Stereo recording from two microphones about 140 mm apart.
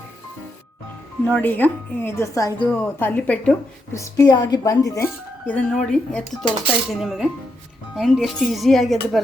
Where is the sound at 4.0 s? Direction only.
25° left (ahead or behind).